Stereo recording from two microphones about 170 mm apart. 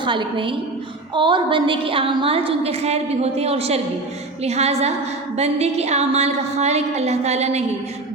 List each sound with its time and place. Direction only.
0.0 s a woman's voice: 30° right (ahead or behind)